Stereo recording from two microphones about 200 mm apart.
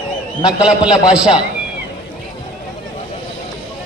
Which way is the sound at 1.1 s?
5° right (ahead or behind).